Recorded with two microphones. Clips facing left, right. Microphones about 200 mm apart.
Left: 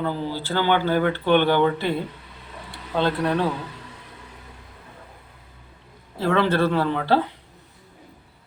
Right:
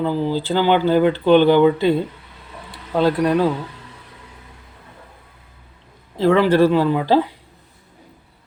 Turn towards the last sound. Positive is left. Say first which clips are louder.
# right 5 dB
turn(degrees=-15)  # may be behind; listen again after turning